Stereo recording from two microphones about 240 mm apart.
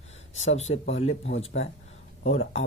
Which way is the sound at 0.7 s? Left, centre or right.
Left.